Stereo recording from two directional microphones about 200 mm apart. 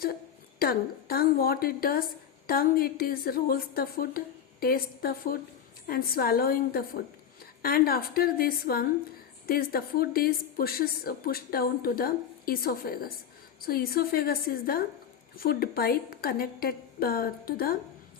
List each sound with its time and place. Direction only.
0.6 s a woman's voice: 50° left (ahead or behind)